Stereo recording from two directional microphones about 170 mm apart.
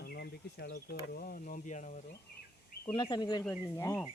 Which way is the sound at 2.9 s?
25° left (ahead or behind).